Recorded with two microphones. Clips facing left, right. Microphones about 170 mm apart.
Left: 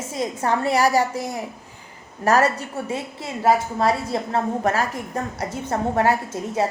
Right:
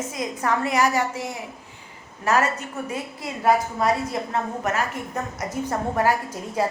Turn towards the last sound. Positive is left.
turn(degrees=25)  # may be behind; listen again after turning